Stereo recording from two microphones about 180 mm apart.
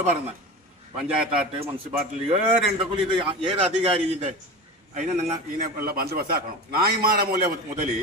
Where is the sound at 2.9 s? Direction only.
30° right (ahead or behind).